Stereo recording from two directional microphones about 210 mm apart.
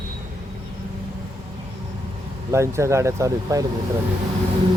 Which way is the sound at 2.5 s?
15° right (ahead or behind).